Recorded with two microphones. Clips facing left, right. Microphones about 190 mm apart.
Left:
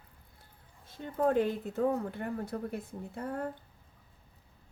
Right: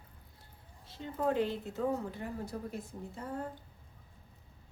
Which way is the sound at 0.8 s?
50° left (ahead or behind).